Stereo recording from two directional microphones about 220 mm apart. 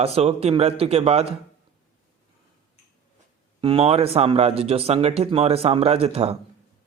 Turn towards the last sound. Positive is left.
turn(degrees=-25)  # may be behind; listen again after turning